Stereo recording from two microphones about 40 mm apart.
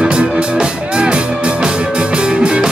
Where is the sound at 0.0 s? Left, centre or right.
Right.